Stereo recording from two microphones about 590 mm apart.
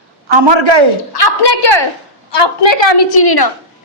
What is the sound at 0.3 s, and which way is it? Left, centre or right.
Speech, right.